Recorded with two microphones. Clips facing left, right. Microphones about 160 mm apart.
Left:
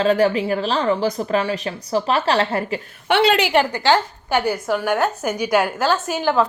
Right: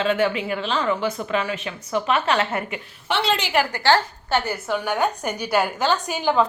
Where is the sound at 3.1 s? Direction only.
65° left (ahead or behind).